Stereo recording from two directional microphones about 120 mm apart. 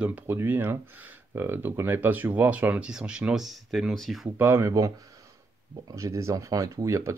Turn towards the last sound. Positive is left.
turn(degrees=-25)  # may be behind; listen again after turning